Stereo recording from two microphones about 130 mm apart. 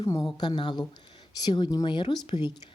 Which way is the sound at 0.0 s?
25° left (ahead or behind).